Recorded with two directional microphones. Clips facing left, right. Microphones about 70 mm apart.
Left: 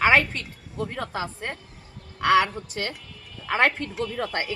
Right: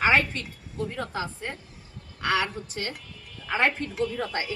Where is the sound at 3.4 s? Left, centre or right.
Left.